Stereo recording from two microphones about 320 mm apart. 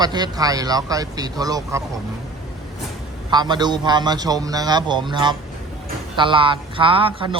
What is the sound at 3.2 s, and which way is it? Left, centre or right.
Speech, centre.